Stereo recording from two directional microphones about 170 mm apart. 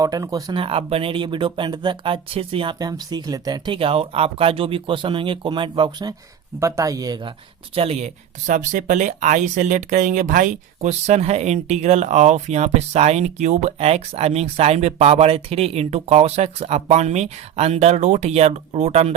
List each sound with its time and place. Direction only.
0.0 s speech: 20° right (ahead or behind)
7.8 s speech: 40° right (ahead or behind)